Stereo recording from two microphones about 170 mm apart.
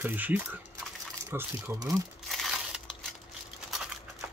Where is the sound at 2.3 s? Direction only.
Centre (ahead or behind).